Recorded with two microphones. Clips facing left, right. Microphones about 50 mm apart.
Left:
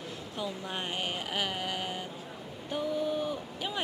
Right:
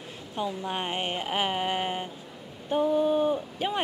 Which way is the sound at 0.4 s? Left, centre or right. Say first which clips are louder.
Right 6 dB; right.